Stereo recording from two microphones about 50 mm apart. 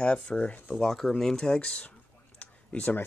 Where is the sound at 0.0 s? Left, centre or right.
Left.